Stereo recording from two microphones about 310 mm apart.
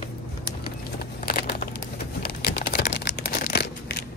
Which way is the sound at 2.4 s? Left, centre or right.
Left.